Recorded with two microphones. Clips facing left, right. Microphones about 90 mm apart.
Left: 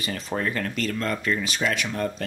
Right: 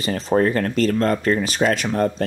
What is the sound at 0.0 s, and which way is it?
Speech, 35° right (ahead or behind).